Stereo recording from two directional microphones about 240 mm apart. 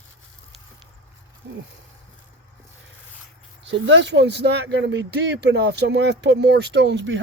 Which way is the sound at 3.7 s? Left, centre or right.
Right.